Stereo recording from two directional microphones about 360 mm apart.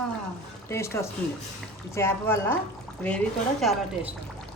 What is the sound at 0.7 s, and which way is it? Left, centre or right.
Speech, centre.